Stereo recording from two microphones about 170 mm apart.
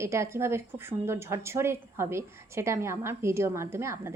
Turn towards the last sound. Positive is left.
turn(degrees=-15)  # may be behind; listen again after turning